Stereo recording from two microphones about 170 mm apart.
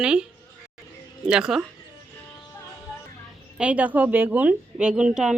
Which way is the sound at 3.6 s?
10° right (ahead or behind).